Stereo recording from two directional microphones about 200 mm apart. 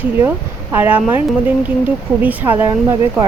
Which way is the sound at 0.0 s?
10° right (ahead or behind).